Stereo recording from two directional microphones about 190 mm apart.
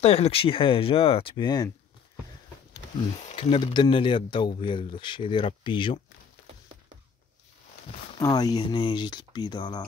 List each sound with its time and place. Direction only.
0.0 s speech: 35° left (ahead or behind)
3.3 s speech: 30° left (ahead or behind)
8.2 s speech: 20° left (ahead or behind)